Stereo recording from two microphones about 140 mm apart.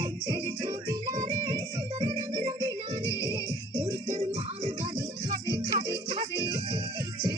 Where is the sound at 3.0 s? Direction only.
20° left (ahead or behind).